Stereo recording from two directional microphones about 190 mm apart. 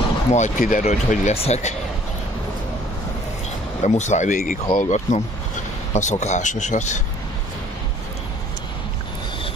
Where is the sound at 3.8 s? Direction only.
40° left (ahead or behind).